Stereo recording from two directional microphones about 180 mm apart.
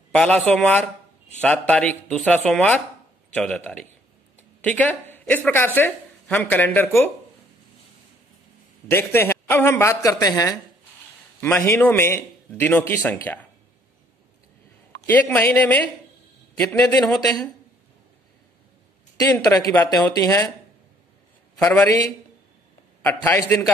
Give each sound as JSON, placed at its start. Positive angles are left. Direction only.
{"t": 0.1, "sound": "speech", "side_deg": 5}
{"t": 8.8, "sound": "speech", "side_deg": 15}
{"t": 15.0, "sound": "speech", "side_deg": 10}
{"t": 19.3, "sound": "speech", "side_deg": 15}
{"t": 21.6, "sound": "speech", "side_deg": 10}
{"t": 23.0, "sound": "speech", "side_deg": 10}